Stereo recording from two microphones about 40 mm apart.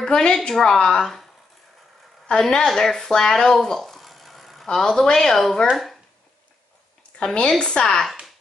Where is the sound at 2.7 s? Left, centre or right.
Centre.